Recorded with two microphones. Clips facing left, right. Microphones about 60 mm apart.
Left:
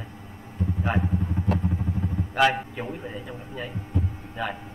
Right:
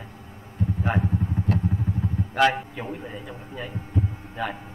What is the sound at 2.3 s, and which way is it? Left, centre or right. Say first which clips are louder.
A man's voice: right 1 dB; centre.